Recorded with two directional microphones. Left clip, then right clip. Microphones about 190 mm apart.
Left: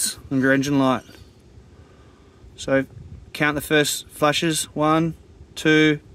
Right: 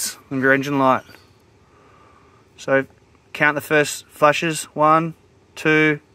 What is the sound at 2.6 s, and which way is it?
Speech, 5° left (ahead or behind).